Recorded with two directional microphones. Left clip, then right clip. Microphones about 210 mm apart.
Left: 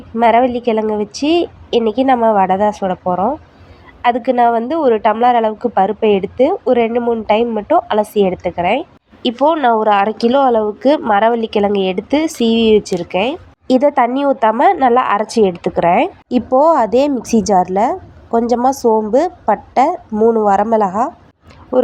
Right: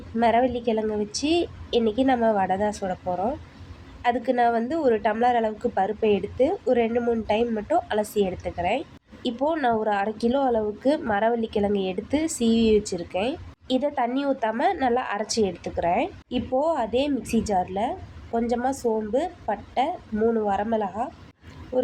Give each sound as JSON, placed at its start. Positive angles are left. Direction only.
{"t": 0.2, "sound": "a woman's voice", "side_deg": 20}
{"t": 13.7, "sound": "a woman's voice", "side_deg": 30}
{"t": 16.3, "sound": "a woman's voice", "side_deg": 35}